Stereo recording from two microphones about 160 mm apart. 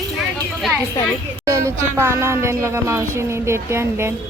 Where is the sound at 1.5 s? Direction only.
20° right (ahead or behind).